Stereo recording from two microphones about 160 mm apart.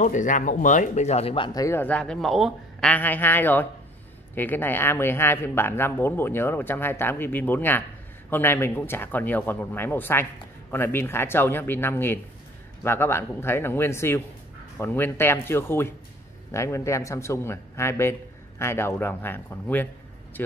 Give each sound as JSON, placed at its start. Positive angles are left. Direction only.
{"t": 0.0, "sound": "speech", "side_deg": 50}